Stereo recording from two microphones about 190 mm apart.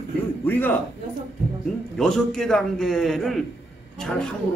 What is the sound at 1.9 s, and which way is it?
A man's voice, 5° left (ahead or behind).